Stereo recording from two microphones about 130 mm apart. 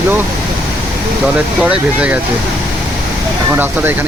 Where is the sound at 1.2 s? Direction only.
10° right (ahead or behind).